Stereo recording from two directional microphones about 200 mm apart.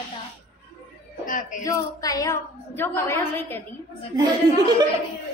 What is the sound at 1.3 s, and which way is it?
Speech, 40° left (ahead or behind).